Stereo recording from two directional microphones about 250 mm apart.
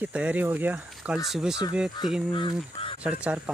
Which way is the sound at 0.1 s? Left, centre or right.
Centre.